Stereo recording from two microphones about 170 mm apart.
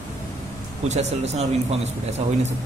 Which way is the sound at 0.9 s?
40° right (ahead or behind).